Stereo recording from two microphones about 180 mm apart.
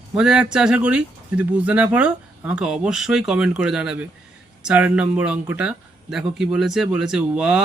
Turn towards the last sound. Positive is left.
turn(degrees=-5)  # may be behind; listen again after turning